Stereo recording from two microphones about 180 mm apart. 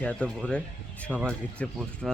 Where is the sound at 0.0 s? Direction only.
5° left (ahead or behind).